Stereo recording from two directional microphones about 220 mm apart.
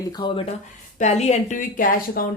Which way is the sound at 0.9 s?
30° left (ahead or behind).